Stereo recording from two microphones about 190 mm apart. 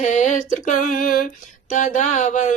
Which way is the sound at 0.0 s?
40° left (ahead or behind).